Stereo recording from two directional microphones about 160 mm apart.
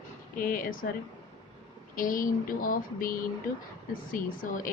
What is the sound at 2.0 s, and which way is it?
Speech, 60° left (ahead or behind).